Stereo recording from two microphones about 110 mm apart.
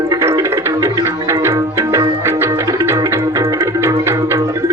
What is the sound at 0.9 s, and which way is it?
Tabla, 25° right (ahead or behind).